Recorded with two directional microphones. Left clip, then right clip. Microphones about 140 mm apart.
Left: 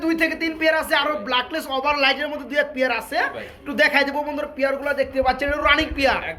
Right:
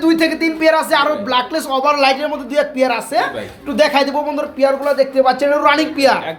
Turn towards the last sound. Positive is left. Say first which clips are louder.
# right 6 dB
turn(degrees=-5)  # may be behind; listen again after turning